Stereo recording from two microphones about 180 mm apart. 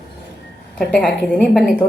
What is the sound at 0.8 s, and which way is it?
A woman's voice, 5° left (ahead or behind).